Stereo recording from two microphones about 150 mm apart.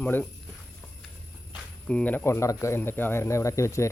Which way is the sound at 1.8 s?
10° left (ahead or behind).